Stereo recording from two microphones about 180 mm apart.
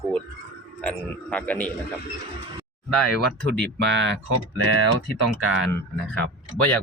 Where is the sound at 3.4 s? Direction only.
75° right (ahead or behind); by 4.1 s 90° right.